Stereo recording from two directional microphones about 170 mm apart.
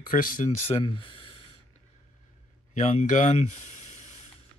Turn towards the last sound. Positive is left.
turn(degrees=40)  # may be behind; listen again after turning